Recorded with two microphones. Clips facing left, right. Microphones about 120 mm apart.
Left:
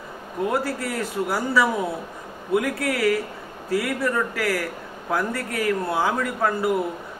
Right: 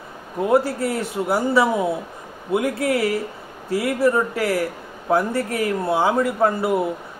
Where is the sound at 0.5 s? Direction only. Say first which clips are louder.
Right 8 dB; 25° right (ahead or behind).